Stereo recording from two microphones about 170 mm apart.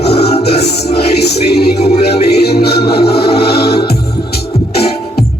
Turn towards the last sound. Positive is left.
turn(degrees=70)  # may be behind; listen again after turning